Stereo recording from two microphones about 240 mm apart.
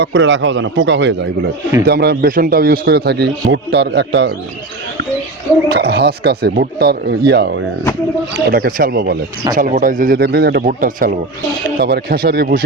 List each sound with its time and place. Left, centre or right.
0.0 s speech: right
5.6 s speech: right